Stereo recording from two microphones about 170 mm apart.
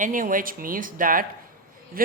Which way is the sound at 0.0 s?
50° right (ahead or behind).